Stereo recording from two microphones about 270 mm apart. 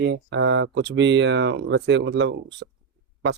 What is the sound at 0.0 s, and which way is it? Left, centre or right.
Speech, right.